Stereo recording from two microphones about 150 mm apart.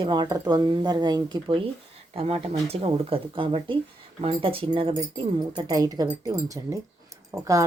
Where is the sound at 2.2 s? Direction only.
40° right (ahead or behind).